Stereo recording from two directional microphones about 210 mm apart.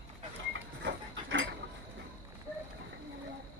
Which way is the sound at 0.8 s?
60° right (ahead or behind).